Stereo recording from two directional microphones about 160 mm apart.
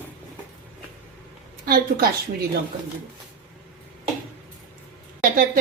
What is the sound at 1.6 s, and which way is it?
Speech, 70° right (ahead or behind).